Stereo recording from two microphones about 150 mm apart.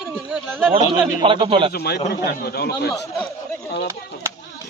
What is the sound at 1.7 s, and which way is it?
Speech, 90° left.